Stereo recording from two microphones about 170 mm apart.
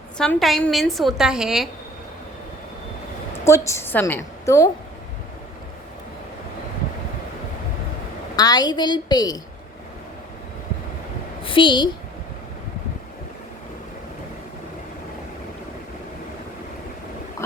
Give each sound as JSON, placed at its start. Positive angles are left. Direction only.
{"t": 0.2, "sound": "a woman's voice", "side_deg": 0}
{"t": 3.4, "sound": "a woman's voice", "side_deg": 15}
{"t": 8.4, "sound": "a woman's voice", "side_deg": 25}
{"t": 11.4, "sound": "a woman's voice", "side_deg": 30}